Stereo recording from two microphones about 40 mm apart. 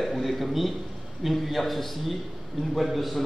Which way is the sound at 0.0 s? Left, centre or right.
Centre.